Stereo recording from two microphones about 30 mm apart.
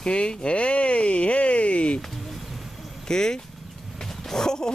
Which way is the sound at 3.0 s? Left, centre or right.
Left.